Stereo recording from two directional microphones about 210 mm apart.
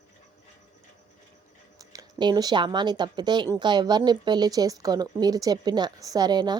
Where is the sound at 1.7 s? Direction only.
15° right (ahead or behind).